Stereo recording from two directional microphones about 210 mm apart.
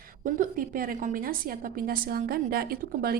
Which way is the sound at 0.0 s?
40° right (ahead or behind).